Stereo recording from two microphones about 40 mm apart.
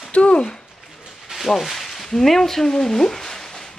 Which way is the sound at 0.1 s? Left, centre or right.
Left.